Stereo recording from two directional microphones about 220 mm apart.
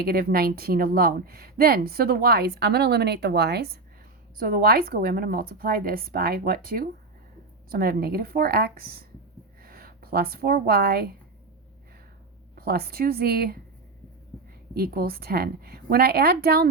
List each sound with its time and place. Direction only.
0.0 s a woman's voice: 45° right (ahead or behind)
12.5 s speech: 45° right (ahead or behind)
14.8 s speech: 45° right (ahead or behind)